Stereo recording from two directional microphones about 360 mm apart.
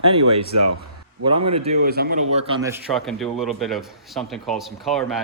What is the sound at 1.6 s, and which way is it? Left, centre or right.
Speech, right.